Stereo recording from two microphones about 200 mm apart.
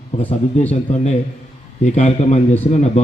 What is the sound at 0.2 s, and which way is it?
A man's voice, 30° left (ahead or behind).